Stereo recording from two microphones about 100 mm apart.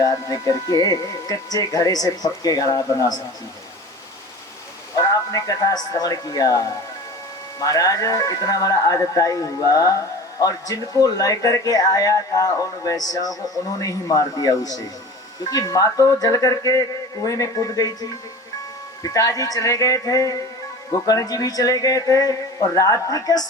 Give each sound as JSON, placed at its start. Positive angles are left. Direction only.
{"t": 0.0, "sound": "speech", "side_deg": 35}
{"t": 4.9, "sound": "speech", "side_deg": 35}